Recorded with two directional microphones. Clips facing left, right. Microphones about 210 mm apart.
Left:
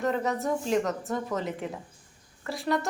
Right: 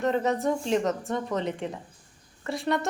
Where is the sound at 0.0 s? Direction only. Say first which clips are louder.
Right 3 dB; 20° right (ahead or behind).